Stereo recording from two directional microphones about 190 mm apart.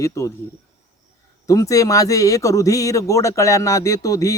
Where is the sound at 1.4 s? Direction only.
15° left (ahead or behind).